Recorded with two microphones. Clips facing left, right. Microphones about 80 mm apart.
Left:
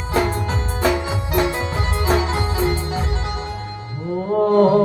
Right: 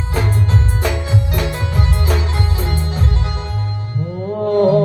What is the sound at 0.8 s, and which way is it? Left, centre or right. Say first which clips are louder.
Music: left 1 dB; left.